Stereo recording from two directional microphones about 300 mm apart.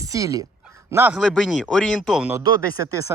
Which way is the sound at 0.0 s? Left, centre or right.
Centre.